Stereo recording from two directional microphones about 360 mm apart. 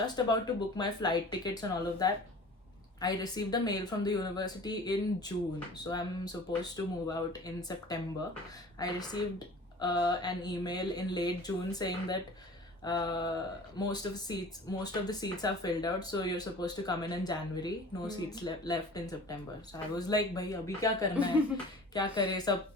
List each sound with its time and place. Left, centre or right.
0.0 s speech: centre
21.2 s speech: centre
21.9 s speech: centre